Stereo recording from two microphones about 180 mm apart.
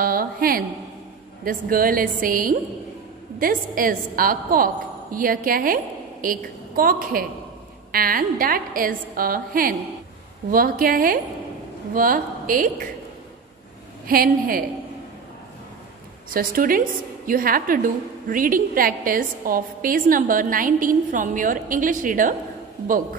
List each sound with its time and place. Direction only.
0.0 s a woman's voice: 55° right (ahead or behind)
14.0 s a woman's voice: 55° right (ahead or behind)
16.3 s a woman's voice: 50° right (ahead or behind)